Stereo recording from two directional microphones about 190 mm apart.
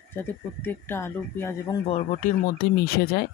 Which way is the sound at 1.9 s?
40° left (ahead or behind).